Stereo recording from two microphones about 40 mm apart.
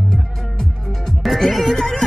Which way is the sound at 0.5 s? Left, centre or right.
Centre.